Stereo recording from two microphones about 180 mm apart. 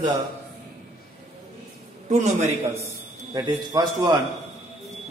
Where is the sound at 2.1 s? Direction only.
40° right (ahead or behind).